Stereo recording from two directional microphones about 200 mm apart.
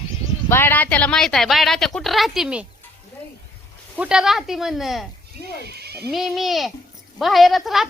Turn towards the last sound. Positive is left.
turn(degrees=0)  # may be behind; listen again after turning